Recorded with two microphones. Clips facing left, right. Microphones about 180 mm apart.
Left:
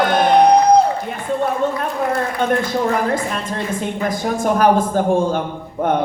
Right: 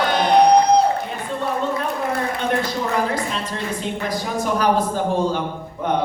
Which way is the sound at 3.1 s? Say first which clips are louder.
Left 3 dB; 50° left (ahead or behind).